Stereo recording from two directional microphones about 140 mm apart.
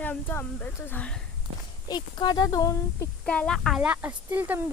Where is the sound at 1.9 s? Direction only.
30° left (ahead or behind).